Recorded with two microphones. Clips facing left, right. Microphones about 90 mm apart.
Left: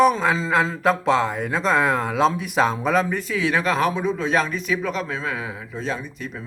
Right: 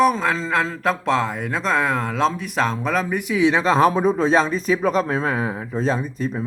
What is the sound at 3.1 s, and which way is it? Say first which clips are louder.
Speech: right 4 dB; 15° right (ahead or behind).